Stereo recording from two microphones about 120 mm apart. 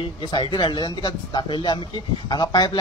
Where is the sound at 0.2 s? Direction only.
40° left (ahead or behind).